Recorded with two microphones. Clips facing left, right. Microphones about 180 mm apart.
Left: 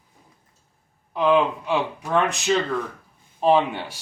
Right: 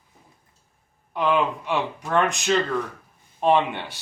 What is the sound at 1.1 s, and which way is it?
Speech, centre (ahead or behind).